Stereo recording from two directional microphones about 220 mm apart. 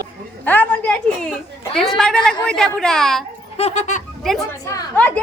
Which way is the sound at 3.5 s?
30° left (ahead or behind).